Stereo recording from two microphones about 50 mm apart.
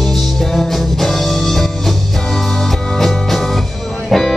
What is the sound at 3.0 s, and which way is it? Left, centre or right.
Music, centre.